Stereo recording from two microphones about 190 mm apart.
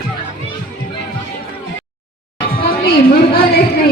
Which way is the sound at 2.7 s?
50° left (ahead or behind).